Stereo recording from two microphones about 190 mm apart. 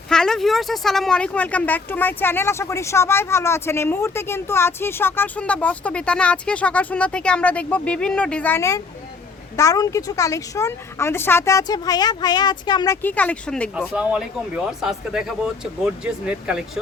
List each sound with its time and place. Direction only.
0.1 s speech: 5° left (ahead or behind)
13.9 s speech: 5° right (ahead or behind)